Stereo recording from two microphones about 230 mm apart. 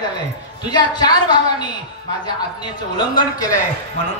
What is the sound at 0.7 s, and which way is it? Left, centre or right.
Speech, centre.